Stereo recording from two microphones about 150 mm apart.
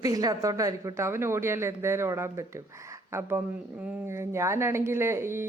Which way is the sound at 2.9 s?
20° right (ahead or behind).